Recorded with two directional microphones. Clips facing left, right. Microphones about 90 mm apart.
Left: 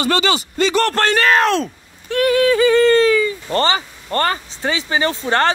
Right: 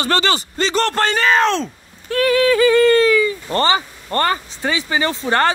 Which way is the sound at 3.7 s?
30° right (ahead or behind).